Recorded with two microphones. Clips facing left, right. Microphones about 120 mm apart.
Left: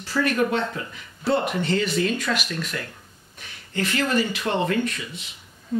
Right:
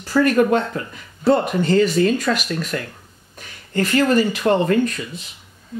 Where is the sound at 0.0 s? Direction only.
45° right (ahead or behind).